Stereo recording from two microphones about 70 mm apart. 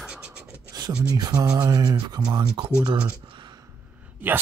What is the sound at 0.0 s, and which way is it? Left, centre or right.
Beatboxing, centre.